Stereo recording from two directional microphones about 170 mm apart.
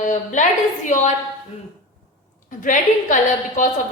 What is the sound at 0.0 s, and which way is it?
Speech, 45° left (ahead or behind).